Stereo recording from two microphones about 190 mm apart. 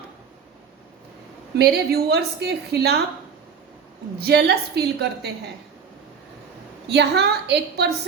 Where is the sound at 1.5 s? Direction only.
55° right (ahead or behind).